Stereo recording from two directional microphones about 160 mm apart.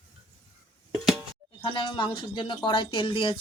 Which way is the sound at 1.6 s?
30° left (ahead or behind).